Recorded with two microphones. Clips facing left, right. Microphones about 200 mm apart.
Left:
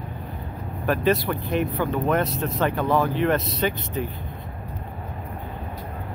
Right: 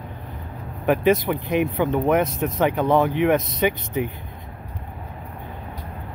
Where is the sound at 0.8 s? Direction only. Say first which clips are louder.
Right 3 dB; 20° right (ahead or behind).